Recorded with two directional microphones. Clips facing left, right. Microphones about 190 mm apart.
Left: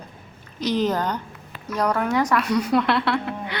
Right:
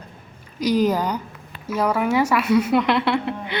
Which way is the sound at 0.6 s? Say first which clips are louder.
Right 3 dB; 10° right (ahead or behind).